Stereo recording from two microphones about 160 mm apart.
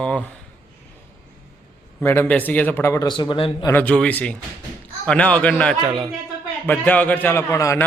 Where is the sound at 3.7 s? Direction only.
10° left (ahead or behind).